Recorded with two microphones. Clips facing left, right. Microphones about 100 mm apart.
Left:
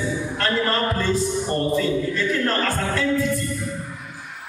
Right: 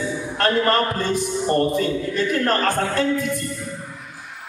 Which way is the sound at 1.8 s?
55° right (ahead or behind).